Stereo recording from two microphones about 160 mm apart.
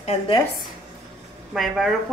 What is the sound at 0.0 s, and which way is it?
Speech, 40° left (ahead or behind).